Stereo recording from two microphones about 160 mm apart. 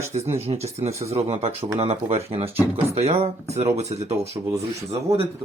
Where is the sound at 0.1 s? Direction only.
40° right (ahead or behind).